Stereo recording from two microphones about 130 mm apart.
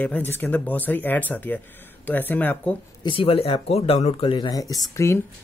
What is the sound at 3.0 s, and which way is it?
Speech, 45° left (ahead or behind).